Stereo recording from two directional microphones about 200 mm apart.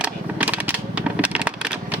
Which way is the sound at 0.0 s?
5° right (ahead or behind).